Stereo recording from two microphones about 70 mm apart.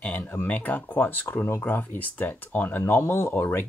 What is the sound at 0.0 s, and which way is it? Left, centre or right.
Speech, left.